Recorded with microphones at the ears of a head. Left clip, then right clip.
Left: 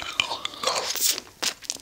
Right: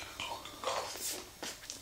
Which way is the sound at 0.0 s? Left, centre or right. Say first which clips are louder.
Left 15 dB; left.